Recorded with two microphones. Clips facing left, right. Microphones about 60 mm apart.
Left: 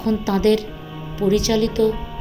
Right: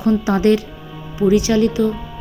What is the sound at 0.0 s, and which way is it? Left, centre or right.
A woman's voice, right.